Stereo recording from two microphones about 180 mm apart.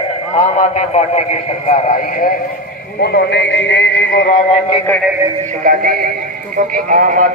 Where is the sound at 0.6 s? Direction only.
40° left (ahead or behind).